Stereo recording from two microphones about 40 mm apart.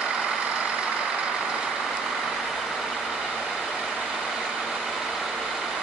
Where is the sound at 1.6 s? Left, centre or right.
Centre.